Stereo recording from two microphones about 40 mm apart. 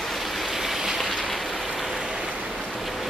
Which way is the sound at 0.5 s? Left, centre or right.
Centre.